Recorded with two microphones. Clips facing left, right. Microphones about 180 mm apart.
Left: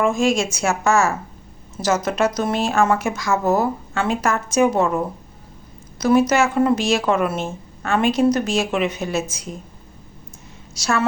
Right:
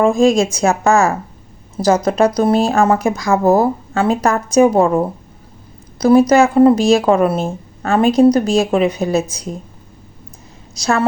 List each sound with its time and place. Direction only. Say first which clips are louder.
0.0 s speech: right 6 dB; 35° right (ahead or behind)
10.8 s speech: right 5 dB; 35° right (ahead or behind)